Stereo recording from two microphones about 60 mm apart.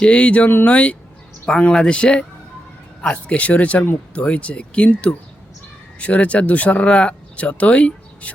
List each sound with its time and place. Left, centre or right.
0.0 s speech: centre